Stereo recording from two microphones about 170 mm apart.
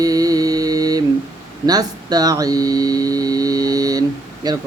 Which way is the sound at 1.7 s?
20° right (ahead or behind).